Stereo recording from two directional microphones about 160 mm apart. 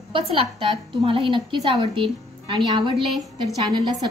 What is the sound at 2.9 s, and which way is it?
Speech, centre (ahead or behind).